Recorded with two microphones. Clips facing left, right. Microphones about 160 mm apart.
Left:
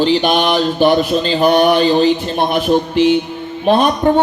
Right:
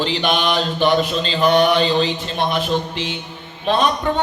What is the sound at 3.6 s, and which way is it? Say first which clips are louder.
Mantra: left 5 dB; 50° left (ahead or behind).